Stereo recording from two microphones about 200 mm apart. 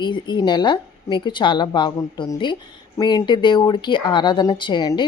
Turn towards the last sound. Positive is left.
turn(degrees=20)  # may be behind; listen again after turning